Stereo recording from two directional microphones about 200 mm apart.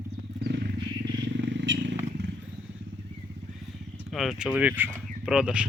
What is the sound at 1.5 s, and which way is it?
Vehicle, 60° right (ahead or behind).